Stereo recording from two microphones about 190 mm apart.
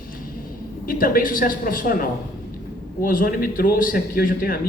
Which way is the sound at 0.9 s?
50° left (ahead or behind).